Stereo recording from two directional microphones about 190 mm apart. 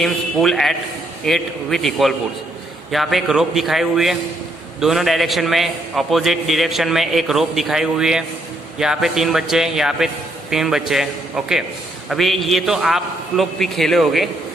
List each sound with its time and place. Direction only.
0.0 s a man's voice: centre (ahead or behind)